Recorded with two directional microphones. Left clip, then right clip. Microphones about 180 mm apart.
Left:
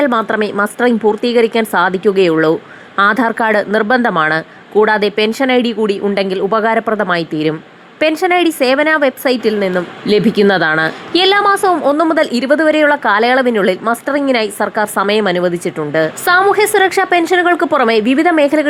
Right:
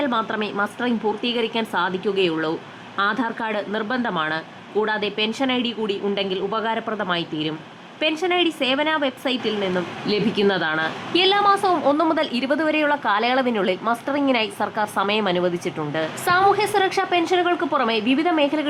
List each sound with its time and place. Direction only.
0.0 s a woman's voice: 30° left (ahead or behind)